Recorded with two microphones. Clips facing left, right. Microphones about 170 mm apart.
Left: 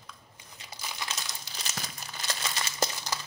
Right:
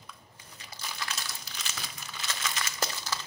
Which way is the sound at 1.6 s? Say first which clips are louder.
Left 4 dB; 40° left (ahead or behind).